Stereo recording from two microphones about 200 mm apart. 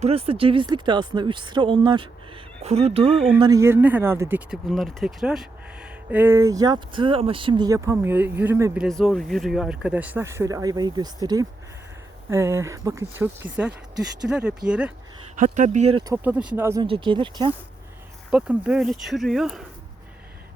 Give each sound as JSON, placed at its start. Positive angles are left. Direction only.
{"t": 0.0, "sound": "speech", "side_deg": -30}
{"t": 8.8, "sound": "speech", "side_deg": 0}
{"t": 15.4, "sound": "speech", "side_deg": -40}
{"t": 16.1, "sound": "speech", "side_deg": -5}
{"t": 16.8, "sound": "speech", "side_deg": -25}
{"t": 18.3, "sound": "speech", "side_deg": -5}